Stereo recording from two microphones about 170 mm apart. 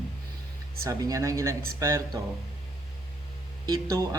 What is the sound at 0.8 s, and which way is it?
Speech, 20° right (ahead or behind).